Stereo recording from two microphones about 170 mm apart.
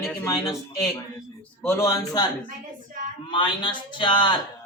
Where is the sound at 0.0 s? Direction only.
15° left (ahead or behind).